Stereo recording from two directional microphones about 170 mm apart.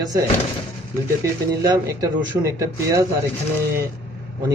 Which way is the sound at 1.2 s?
20° right (ahead or behind).